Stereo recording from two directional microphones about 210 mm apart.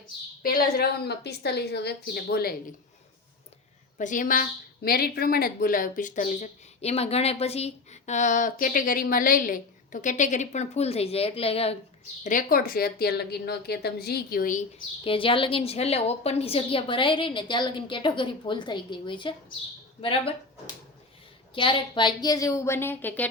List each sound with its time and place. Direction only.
0.4 s speech: 45° left (ahead or behind)
3.9 s a woman's voice: 40° left (ahead or behind)
12.2 s speech: 40° left (ahead or behind)
15.0 s a woman's voice: 25° left (ahead or behind)
21.5 s a woman's voice: 25° left (ahead or behind); by 23.3 s 10° left (ahead or behind)